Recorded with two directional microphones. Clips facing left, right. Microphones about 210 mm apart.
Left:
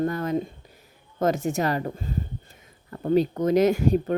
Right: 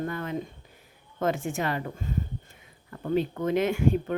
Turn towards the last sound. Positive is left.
turn(degrees=40)  # may be behind; listen again after turning